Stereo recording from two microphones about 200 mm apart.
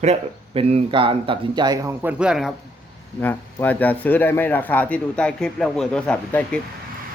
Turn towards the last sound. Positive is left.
turn(degrees=5)  # may be behind; listen again after turning